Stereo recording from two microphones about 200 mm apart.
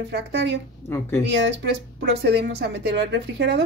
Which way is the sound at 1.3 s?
55° right (ahead or behind).